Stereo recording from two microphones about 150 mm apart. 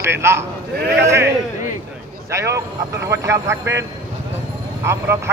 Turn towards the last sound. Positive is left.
turn(degrees=-20)  # may be behind; listen again after turning